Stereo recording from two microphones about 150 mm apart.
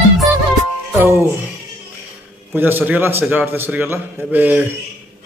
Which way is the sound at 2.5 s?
15° right (ahead or behind).